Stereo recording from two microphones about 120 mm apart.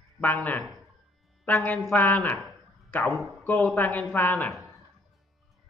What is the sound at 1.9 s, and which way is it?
Speech, 15° left (ahead or behind).